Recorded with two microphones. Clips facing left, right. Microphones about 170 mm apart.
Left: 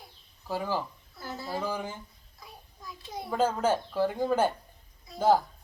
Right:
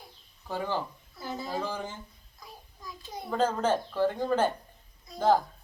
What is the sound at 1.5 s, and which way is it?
A child's voice, 10° left (ahead or behind).